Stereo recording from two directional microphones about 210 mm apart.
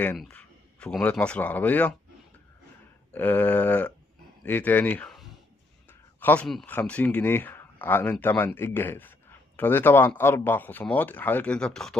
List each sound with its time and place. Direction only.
0.0 s speech: 5° left (ahead or behind)
3.1 s speech: 10° left (ahead or behind)